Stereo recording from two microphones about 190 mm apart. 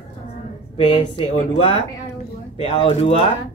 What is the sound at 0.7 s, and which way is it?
Speech, 30° left (ahead or behind).